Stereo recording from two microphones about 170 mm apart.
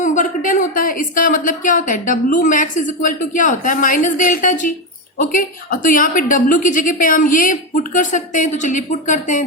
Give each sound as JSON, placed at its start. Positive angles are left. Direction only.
{"t": 0.0, "sound": "speech", "side_deg": 50}